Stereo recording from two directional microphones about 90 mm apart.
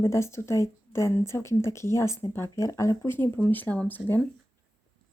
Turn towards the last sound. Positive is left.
turn(degrees=20)  # may be behind; listen again after turning